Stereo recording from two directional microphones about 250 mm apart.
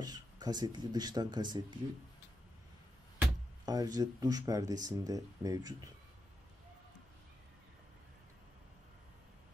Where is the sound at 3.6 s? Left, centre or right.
Centre.